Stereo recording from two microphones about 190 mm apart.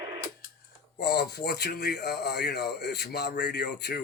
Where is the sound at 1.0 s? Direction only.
60° left (ahead or behind).